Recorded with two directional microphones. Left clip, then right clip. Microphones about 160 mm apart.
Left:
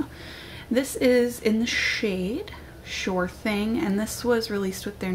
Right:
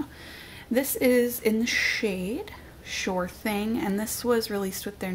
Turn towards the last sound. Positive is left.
turn(degrees=-40)  # may be behind; listen again after turning